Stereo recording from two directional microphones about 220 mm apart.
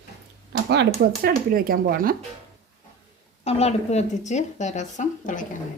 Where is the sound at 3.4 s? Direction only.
30° left (ahead or behind).